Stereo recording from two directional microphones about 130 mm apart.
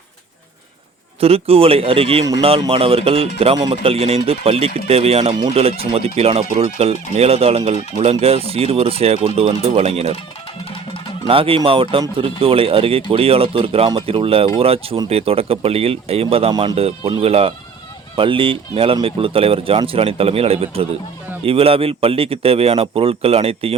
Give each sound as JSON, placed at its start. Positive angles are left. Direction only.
{"t": 1.2, "sound": "speech", "side_deg": -50}
{"t": 11.3, "sound": "speech", "side_deg": -45}
{"t": 16.5, "sound": "speech", "side_deg": -35}
{"t": 16.7, "sound": "speech", "side_deg": -50}